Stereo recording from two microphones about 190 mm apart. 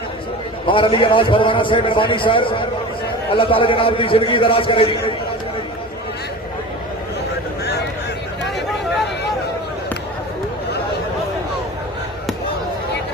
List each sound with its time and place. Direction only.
0.7 s a man's voice: 25° left (ahead or behind)